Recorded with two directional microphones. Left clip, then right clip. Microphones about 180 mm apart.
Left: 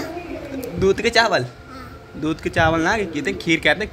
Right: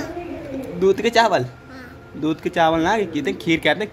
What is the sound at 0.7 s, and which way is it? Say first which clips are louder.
Speech: even; 5° right (ahead or behind).